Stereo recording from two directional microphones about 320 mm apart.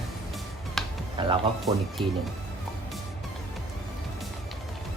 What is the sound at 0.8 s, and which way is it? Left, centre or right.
Finger snapping, centre.